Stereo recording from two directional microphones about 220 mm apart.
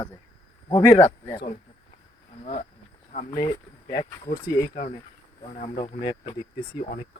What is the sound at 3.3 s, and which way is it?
Speech, 15° left (ahead or behind).